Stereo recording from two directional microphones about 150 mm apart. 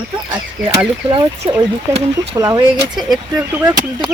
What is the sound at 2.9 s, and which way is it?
Speech, 5° right (ahead or behind).